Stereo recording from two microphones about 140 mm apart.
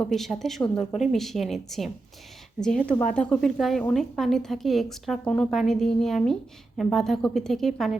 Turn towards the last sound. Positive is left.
turn(degrees=0)  # may be behind; listen again after turning